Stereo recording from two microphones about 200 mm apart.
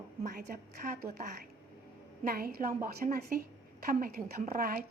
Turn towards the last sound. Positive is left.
turn(degrees=-45)  # may be behind; listen again after turning